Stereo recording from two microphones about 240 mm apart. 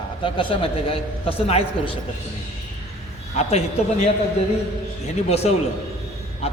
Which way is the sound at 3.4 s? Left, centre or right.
Left.